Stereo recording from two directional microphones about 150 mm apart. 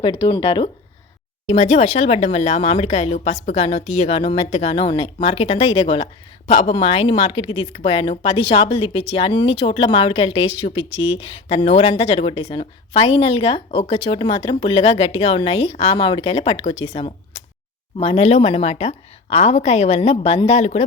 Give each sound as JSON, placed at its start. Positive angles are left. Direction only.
{"t": 0.0, "sound": "speech", "side_deg": 35}
{"t": 1.5, "sound": "speech", "side_deg": 45}